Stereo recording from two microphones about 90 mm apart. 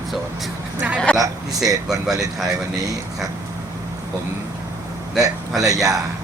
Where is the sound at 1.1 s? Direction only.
15° left (ahead or behind).